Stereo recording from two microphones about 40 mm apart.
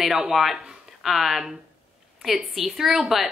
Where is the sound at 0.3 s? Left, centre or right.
Centre.